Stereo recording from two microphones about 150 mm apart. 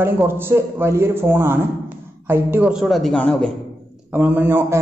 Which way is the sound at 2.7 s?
Centre (ahead or behind).